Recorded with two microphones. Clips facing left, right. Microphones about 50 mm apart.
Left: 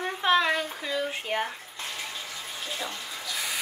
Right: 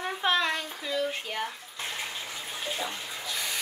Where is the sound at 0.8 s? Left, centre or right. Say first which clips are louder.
Left 1 dB; left.